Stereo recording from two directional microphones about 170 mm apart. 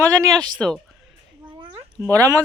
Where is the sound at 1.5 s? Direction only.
30° right (ahead or behind).